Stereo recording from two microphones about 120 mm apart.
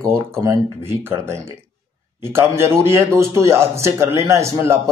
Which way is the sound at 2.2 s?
20° right (ahead or behind).